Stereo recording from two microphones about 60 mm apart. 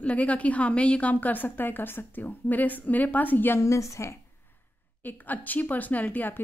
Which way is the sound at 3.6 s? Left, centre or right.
Left.